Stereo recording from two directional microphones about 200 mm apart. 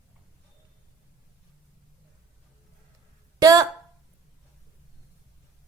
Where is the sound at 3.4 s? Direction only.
15° right (ahead or behind).